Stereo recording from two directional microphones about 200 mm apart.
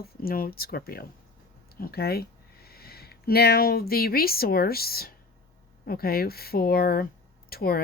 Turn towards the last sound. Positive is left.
turn(degrees=50)  # may be behind; listen again after turning